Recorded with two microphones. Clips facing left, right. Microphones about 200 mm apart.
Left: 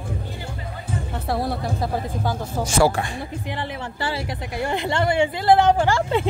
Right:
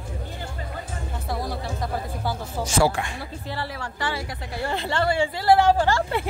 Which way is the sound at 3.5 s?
20° left (ahead or behind).